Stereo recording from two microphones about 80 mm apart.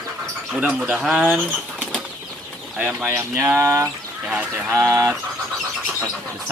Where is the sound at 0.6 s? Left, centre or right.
Centre.